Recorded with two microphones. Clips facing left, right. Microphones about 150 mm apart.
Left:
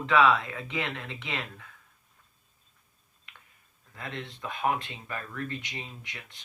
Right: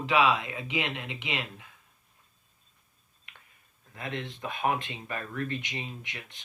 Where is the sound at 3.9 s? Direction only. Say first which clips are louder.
Right 3 dB; 20° right (ahead or behind).